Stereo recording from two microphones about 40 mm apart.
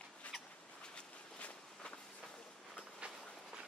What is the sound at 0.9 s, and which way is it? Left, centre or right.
Walk, left.